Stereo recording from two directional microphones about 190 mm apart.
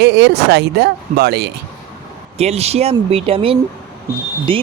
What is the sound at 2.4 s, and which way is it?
Speech, 35° right (ahead or behind).